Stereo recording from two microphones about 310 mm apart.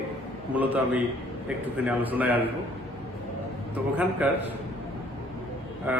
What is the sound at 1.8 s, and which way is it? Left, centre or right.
Speech, centre.